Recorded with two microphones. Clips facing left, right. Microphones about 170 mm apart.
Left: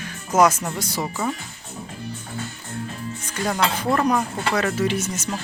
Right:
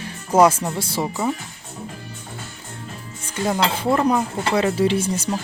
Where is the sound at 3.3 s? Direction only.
25° right (ahead or behind).